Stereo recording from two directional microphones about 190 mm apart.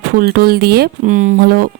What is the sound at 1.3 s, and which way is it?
Speech, 50° right (ahead or behind).